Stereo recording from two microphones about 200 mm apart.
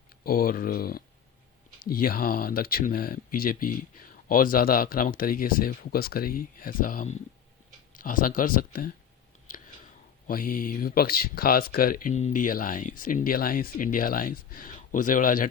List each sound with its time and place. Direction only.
0.3 s speech: 45° left (ahead or behind)
10.2 s speech: 45° left (ahead or behind)